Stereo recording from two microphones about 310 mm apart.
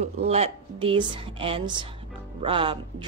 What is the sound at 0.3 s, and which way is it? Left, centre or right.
A woman's voice, centre.